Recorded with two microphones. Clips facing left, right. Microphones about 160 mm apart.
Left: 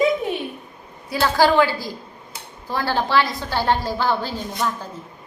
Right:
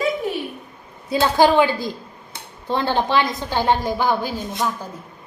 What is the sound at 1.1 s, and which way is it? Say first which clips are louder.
A woman's voice: right 2 dB; 20° right (ahead or behind).